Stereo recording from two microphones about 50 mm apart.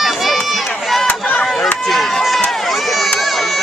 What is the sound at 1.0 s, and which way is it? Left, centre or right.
Chop, left.